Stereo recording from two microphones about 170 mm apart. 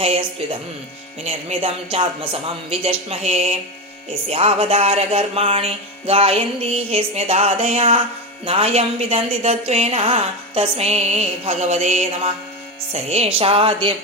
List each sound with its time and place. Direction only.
0.0 s a woman's voice: 35° right (ahead or behind)